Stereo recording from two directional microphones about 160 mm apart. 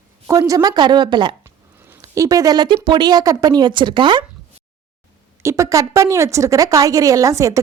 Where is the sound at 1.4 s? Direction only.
15° right (ahead or behind); by 4.2 s 30° right (ahead or behind).